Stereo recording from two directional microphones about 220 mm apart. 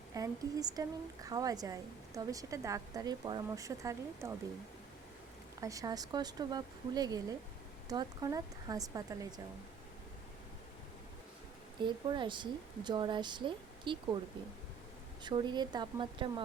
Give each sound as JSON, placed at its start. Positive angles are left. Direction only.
{"t": 0.1, "sound": "a woman's voice", "side_deg": -15}
{"t": 5.5, "sound": "a woman's voice", "side_deg": -15}
{"t": 11.8, "sound": "speech", "side_deg": -20}
{"t": 15.2, "sound": "speech", "side_deg": -20}